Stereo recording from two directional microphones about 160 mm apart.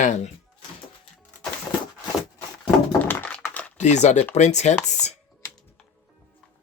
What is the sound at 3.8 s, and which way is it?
Speech, 45° left (ahead or behind).